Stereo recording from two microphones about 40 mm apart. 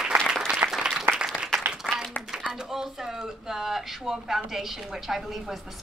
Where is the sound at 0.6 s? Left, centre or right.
Right.